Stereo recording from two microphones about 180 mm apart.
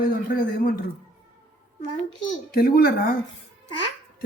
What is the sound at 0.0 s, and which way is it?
Speech, 55° left (ahead or behind).